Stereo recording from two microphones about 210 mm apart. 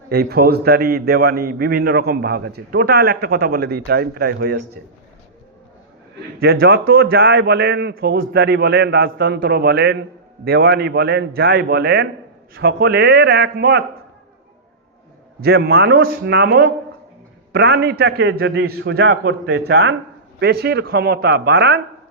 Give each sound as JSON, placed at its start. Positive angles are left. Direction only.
{"t": 0.1, "sound": "a man's voice", "side_deg": -50}
{"t": 6.4, "sound": "a man's voice", "side_deg": -50}
{"t": 15.4, "sound": "a man's voice", "side_deg": -50}